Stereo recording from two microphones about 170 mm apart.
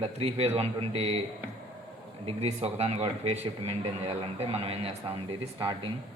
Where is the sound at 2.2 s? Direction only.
35° right (ahead or behind).